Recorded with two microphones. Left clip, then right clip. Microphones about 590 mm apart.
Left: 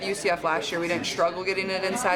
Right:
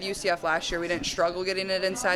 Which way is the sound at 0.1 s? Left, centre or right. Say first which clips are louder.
Left 1 dB; right.